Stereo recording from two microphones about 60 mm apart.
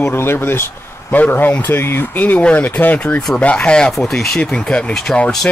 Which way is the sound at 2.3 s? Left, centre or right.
Left.